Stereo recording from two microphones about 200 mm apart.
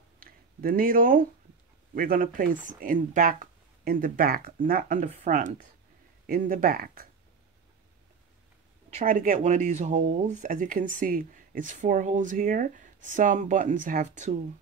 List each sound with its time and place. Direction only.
0.2 s a sound: 45° right (ahead or behind)
2.0 s speech: 45° right (ahead or behind)
8.9 s speech: 40° right (ahead or behind)